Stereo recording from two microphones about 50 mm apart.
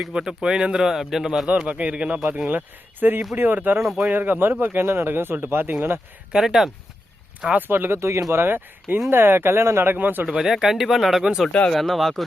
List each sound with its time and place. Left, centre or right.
0.1 s speech: centre
1.5 s speech: right
2.5 s speech: right
3.8 s speech: centre
4.1 s speech: right
6.3 s speech: centre
7.7 s speech: right
7.9 s speech: right
8.3 s speech: right
10.2 s speech: centre
11.2 s speech: centre
11.7 s speech: centre